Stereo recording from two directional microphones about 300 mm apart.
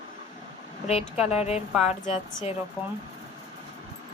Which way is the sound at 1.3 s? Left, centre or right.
Left.